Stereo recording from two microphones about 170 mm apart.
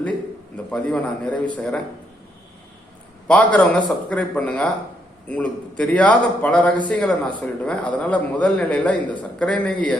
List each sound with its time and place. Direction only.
0.7 s speech: 5° left (ahead or behind)
3.2 s a man's voice: 5° left (ahead or behind)